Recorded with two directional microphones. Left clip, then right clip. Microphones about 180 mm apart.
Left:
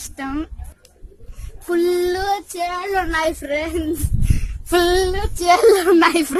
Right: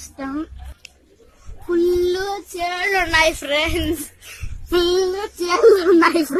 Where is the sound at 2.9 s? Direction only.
35° left (ahead or behind).